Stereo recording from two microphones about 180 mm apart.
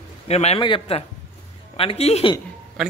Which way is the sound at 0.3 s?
35° left (ahead or behind).